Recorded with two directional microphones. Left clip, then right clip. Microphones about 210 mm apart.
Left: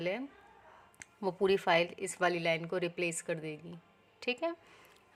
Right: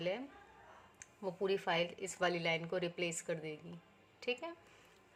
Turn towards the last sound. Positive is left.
turn(degrees=30)  # may be behind; listen again after turning